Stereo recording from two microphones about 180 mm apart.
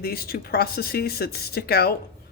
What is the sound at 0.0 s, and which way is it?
Speech, 55° left (ahead or behind).